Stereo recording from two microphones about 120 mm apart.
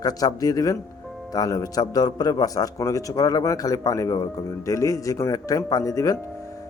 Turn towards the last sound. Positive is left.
turn(degrees=30)  # may be behind; listen again after turning